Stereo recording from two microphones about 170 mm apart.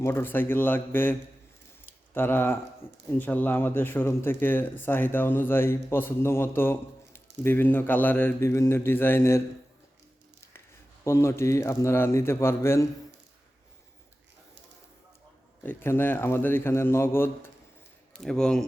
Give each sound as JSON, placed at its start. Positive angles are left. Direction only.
{"t": 0.0, "sound": "speech", "side_deg": 15}
{"t": 2.1, "sound": "speech", "side_deg": 10}
{"t": 11.0, "sound": "speech", "side_deg": 15}
{"t": 15.6, "sound": "a man's voice", "side_deg": 10}